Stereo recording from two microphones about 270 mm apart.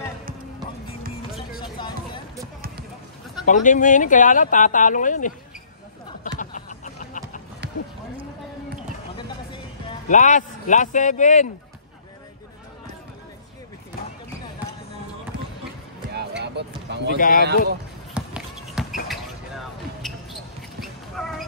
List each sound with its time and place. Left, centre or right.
1.6 s music: centre
3.4 s speech: left
6.4 s a sound: left
9.1 s music: centre
16.2 s vehicle: right
17.2 s speech: left
18.1 s shuffle: centre
19.0 s basketball bounce: centre
20.8 s cat: centre